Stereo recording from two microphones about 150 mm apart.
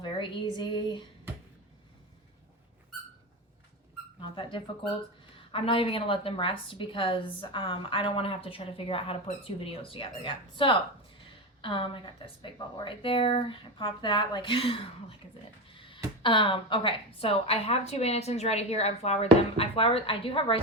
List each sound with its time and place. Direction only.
0.0 s a woman's voice: 30° left (ahead or behind)
4.2 s a woman's voice: 35° left (ahead or behind)
15.7 s a sound: 35° left (ahead or behind)
16.2 s a woman's voice: 35° left (ahead or behind)